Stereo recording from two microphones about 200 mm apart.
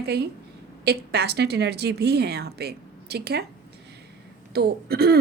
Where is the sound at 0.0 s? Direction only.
55° right (ahead or behind).